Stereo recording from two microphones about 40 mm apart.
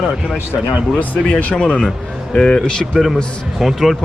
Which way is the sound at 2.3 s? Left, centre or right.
Centre.